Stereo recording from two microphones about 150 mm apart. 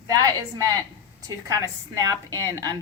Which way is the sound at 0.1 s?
25° right (ahead or behind).